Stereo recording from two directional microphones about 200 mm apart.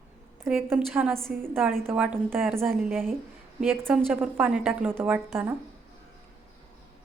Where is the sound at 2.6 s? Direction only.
Centre (ahead or behind).